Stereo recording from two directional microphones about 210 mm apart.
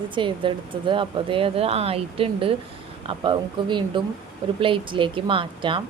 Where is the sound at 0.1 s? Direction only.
25° right (ahead or behind).